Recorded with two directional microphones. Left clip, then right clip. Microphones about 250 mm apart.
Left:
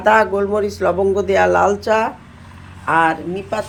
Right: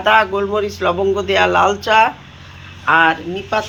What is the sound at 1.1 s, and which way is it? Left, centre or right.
Speech, centre.